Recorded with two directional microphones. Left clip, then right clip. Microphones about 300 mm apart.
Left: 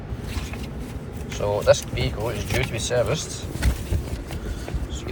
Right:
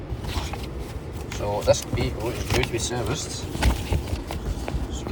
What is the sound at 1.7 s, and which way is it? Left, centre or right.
Speech, right.